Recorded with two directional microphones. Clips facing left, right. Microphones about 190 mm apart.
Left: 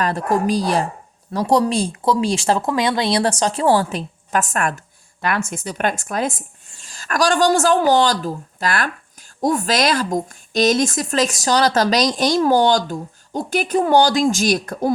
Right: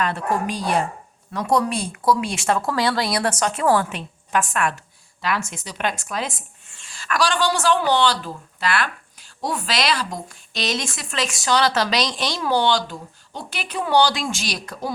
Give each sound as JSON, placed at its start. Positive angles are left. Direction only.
{"t": 0.0, "sound": "speech", "side_deg": 40}